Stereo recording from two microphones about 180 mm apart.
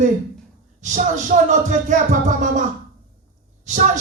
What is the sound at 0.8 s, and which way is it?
Speech, 45° right (ahead or behind).